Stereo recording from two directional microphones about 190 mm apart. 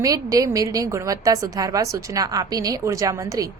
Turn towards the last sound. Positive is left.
turn(degrees=-15)  # may be behind; listen again after turning